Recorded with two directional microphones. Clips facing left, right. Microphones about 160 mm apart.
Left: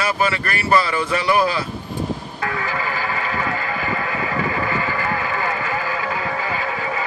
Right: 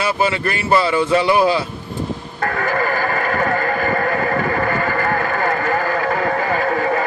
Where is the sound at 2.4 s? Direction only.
50° right (ahead or behind).